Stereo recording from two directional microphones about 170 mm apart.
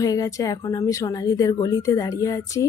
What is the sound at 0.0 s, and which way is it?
Speech, 20° left (ahead or behind).